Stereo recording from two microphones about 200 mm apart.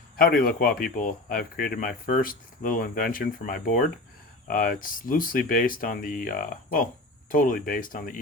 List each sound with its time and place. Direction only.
0.2 s speech: 45° left (ahead or behind)